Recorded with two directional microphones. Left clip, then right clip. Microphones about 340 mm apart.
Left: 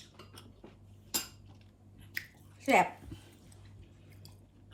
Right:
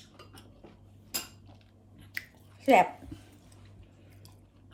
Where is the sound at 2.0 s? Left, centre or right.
Centre.